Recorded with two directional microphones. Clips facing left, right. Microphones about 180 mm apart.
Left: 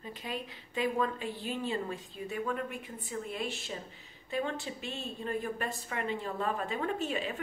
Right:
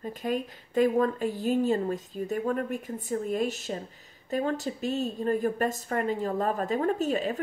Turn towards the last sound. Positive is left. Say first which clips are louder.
# right 7 dB
turn(degrees=-40)  # may be behind; listen again after turning